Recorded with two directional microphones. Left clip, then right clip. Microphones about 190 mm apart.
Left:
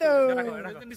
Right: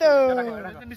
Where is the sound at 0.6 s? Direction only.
50° left (ahead or behind).